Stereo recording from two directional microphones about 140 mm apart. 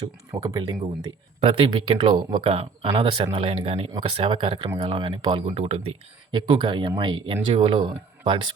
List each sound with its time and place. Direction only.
0.4 s speech: 25° right (ahead or behind)
1.4 s speech: 40° right (ahead or behind)
6.3 s speech: 35° right (ahead or behind)